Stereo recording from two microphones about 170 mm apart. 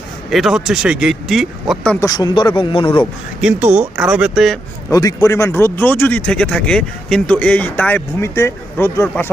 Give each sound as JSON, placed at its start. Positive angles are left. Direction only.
{"t": 0.3, "sound": "speech", "side_deg": 0}
{"t": 2.0, "sound": "speech", "side_deg": 25}
{"t": 3.4, "sound": "speech", "side_deg": -10}
{"t": 4.9, "sound": "speech", "side_deg": 20}